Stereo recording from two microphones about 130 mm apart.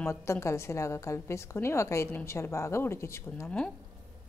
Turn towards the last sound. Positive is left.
turn(degrees=5)  # may be behind; listen again after turning